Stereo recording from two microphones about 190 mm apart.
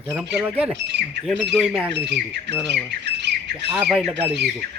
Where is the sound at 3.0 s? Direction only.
65° right (ahead or behind).